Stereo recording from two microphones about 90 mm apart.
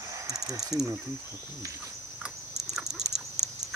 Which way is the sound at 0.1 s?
40° right (ahead or behind).